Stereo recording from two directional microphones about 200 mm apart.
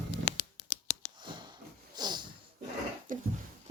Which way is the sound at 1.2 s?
20° right (ahead or behind).